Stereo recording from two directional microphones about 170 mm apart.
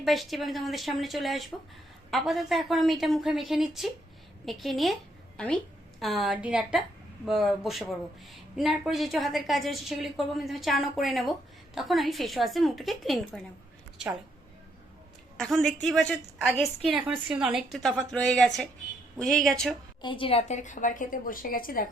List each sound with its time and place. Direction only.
0.0 s a woman's voice: centre (ahead or behind)
6.0 s a woman's voice: centre (ahead or behind)
15.4 s a woman's voice: centre (ahead or behind)
20.0 s a woman's voice: 30° left (ahead or behind); by 21.8 s 55° left (ahead or behind)